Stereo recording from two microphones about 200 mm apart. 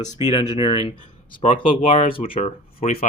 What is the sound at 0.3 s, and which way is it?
Speech, 25° left (ahead or behind).